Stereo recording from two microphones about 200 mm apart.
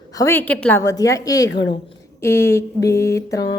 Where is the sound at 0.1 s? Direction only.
15° left (ahead or behind).